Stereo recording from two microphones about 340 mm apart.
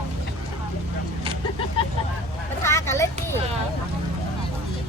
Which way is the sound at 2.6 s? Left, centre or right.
Centre.